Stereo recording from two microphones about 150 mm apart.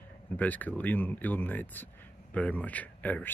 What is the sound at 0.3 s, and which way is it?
Speech, 10° left (ahead or behind).